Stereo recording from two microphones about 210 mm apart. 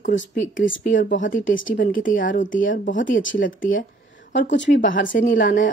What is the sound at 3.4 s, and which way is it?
Speech, 40° left (ahead or behind).